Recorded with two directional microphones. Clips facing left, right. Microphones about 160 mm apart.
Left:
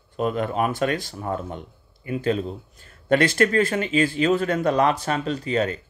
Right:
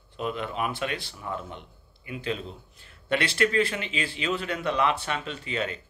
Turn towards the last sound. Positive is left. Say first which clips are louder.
# left 8 dB
turn(degrees=40)  # may be behind; listen again after turning